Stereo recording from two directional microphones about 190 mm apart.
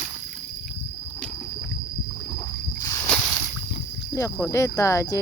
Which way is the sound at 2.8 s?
15° left (ahead or behind).